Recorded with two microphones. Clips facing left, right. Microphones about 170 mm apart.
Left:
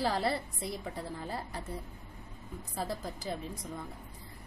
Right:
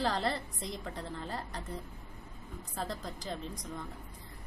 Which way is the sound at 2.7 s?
5° left (ahead or behind).